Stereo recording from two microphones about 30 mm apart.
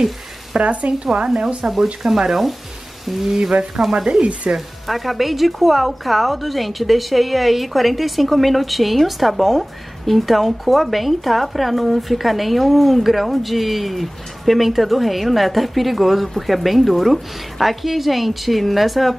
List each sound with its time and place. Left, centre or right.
0.6 s speech: right
1.6 s speech: right
2.0 s speech: centre
3.9 s speech: right
4.6 s speech: centre